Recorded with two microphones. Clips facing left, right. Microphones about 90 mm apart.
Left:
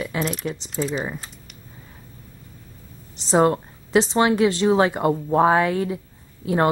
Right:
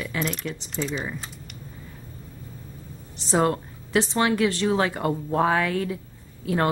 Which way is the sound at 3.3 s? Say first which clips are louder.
Left 4 dB; 25° left (ahead or behind).